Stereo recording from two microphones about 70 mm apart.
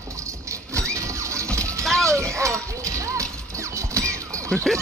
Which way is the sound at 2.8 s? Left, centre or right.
Right.